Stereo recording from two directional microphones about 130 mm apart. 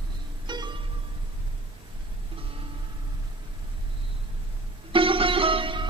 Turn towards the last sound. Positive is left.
turn(degrees=-40)  # may be behind; listen again after turning